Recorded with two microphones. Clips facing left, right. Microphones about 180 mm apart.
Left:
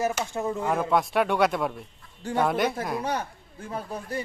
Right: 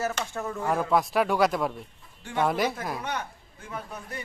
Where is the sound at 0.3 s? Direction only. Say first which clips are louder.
Left 3 dB; 20° left (ahead or behind).